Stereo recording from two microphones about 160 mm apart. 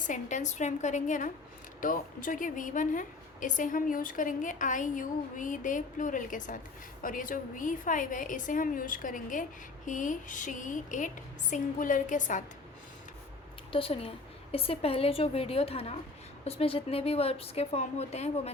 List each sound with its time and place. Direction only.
0.1 s a woman's voice: 50° left (ahead or behind)
13.7 s a woman's voice: 35° left (ahead or behind)